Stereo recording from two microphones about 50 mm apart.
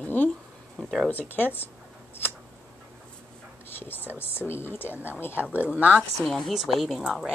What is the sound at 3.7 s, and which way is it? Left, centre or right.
Speech, left.